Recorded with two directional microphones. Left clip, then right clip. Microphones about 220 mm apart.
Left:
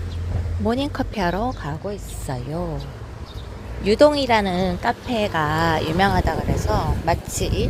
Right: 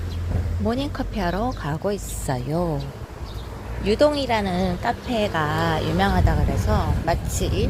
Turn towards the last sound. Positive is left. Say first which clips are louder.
# left 1 dB
turn(degrees=5)  # may be behind; listen again after turning